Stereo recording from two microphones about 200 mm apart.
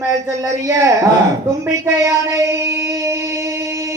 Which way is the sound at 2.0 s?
15° right (ahead or behind).